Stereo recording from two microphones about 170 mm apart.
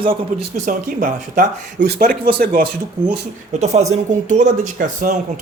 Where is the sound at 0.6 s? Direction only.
50° right (ahead or behind).